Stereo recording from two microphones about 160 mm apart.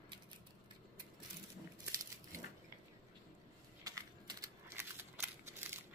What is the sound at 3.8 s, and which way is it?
Computer keyboard, 20° right (ahead or behind).